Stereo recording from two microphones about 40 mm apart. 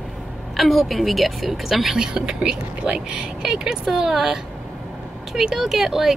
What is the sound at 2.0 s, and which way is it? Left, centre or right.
Speech, centre.